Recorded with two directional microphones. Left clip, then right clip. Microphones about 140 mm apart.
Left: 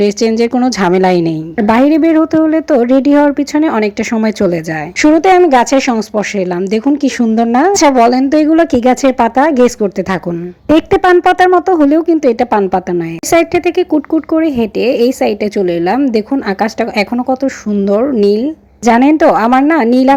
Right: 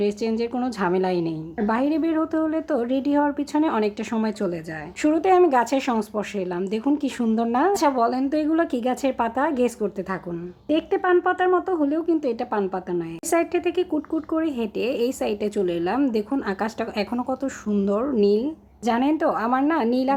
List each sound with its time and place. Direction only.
0.0 s a woman's voice: 45° left (ahead or behind)